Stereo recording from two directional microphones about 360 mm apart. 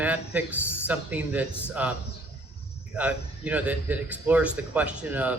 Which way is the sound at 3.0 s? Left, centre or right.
Centre.